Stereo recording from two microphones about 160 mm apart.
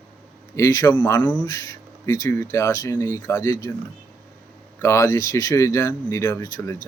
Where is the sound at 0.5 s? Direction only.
20° left (ahead or behind).